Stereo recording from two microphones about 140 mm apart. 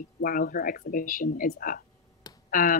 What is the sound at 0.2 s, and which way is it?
Speech, 90° left.